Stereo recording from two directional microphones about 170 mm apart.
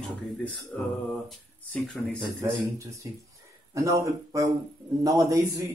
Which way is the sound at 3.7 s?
20° right (ahead or behind).